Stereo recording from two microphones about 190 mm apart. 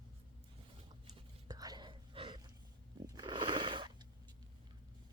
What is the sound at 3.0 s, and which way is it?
Wild animals, 25° right (ahead or behind).